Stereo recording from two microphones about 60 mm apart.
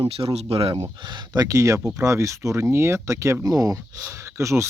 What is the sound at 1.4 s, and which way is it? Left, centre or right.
Speech, right.